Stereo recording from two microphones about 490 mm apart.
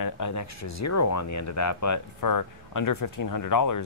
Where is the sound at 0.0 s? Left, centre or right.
Left.